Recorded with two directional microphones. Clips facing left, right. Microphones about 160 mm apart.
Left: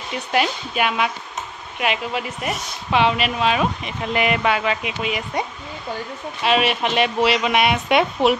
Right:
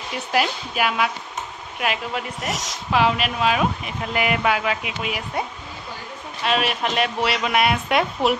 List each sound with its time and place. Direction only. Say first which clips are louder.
0.1 s speech: left 1 dB; centre (ahead or behind)
2.5 s a woman's voice: even; 90° right
2.9 s speech: left 1 dB; centre (ahead or behind)
6.4 s speech: left 3 dB; centre (ahead or behind)